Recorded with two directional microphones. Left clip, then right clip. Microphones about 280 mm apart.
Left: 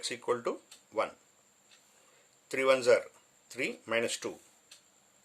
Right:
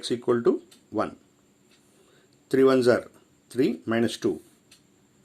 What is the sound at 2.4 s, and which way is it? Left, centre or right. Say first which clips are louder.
Speech: right 6 dB; centre.